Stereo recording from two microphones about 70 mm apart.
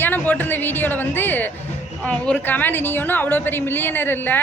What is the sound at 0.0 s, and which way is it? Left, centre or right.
A woman's voice, left.